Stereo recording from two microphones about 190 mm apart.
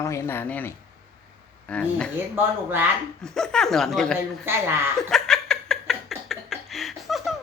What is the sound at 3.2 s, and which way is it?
Speech, 5° left (ahead or behind).